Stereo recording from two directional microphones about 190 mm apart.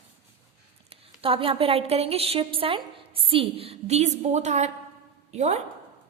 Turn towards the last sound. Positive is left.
turn(degrees=-35)  # may be behind; listen again after turning